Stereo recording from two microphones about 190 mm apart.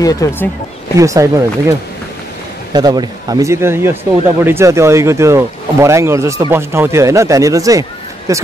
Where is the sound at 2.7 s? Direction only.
20° right (ahead or behind).